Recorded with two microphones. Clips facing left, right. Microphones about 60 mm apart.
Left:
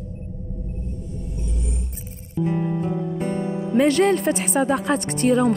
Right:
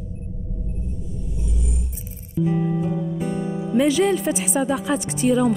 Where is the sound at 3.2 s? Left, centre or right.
Left.